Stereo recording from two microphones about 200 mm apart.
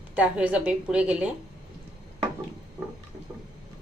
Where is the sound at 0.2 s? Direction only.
5° right (ahead or behind).